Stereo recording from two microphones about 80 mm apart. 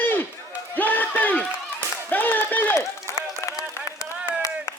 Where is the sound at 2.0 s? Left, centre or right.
Left.